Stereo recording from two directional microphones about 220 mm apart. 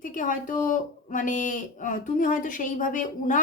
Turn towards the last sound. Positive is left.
turn(degrees=35)  # may be behind; listen again after turning